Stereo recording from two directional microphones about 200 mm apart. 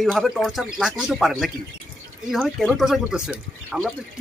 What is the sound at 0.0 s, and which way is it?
Speech, centre (ahead or behind).